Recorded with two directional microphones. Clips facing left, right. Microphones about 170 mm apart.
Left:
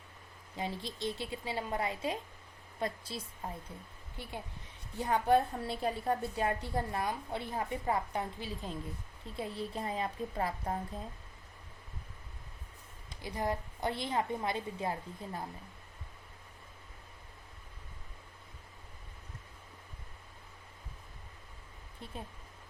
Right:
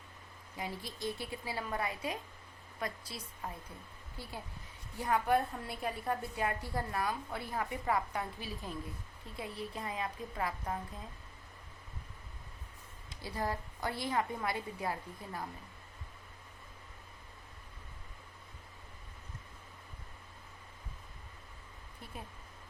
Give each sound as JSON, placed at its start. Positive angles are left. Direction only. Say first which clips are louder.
{"t": 0.5, "sound": "a woman's voice", "louder": "left 3 dB", "side_deg": 25}
{"t": 13.2, "sound": "a woman's voice", "louder": "left 2 dB", "side_deg": 20}